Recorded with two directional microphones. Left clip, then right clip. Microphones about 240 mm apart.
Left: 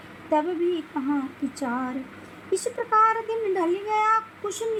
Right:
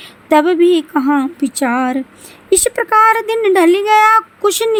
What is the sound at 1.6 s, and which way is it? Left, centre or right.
A woman's voice, right.